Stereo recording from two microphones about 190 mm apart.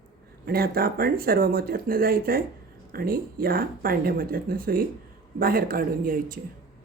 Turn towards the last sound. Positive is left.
turn(degrees=-45)  # may be behind; listen again after turning